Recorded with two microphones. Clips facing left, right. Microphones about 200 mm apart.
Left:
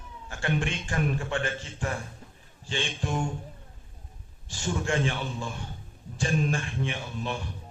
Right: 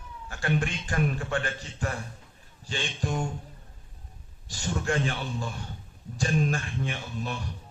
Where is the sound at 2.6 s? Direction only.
40° right (ahead or behind).